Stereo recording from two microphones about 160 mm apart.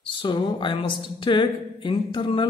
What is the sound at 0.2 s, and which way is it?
A woman's voice, 30° left (ahead or behind).